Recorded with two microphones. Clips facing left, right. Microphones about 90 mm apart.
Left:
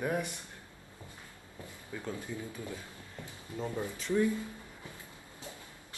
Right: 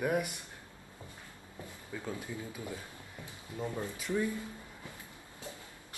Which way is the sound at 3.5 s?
20° left (ahead or behind).